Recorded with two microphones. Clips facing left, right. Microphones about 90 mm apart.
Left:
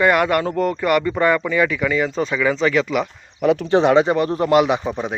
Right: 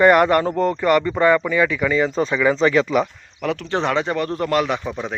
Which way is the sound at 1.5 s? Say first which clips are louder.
Even; 20° right (ahead or behind).